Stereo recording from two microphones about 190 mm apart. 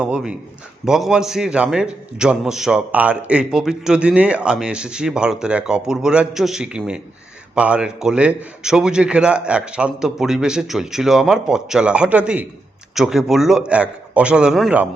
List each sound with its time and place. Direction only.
0.0 s a man's voice: 5° right (ahead or behind)